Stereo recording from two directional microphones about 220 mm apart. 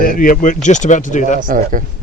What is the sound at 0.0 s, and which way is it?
Speech, 40° left (ahead or behind).